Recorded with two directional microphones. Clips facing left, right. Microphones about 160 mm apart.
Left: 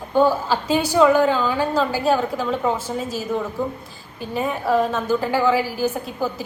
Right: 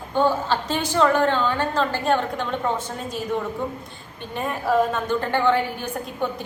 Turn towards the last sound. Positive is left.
turn(degrees=5)  # may be behind; listen again after turning